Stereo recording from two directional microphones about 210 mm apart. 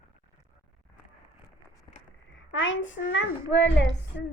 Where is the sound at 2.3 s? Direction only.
65° left (ahead or behind).